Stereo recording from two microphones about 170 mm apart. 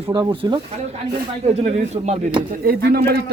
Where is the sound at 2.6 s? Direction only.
70° right (ahead or behind).